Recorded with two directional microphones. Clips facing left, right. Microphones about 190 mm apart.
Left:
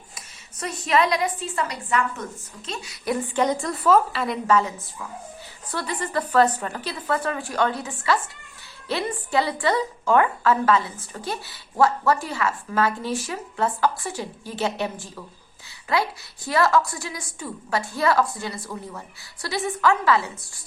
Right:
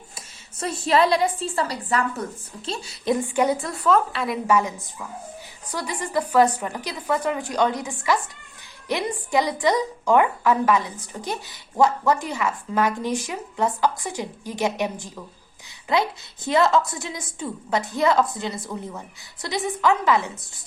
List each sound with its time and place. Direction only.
0.6 s a woman's voice: 30° right (ahead or behind); by 4.4 s centre (ahead or behind)
4.4 s a woman's voice: 15° right (ahead or behind)
5.7 s a woman's voice: 10° right (ahead or behind)